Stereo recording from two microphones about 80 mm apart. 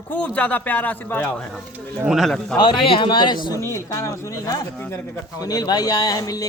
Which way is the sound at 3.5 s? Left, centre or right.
Left.